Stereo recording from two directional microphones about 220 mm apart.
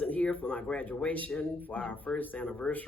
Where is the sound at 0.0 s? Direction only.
5° left (ahead or behind).